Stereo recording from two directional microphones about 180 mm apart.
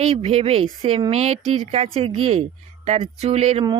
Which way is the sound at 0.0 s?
35° right (ahead or behind).